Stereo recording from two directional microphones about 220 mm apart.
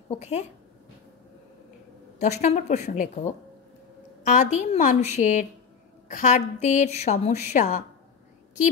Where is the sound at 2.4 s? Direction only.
35° left (ahead or behind).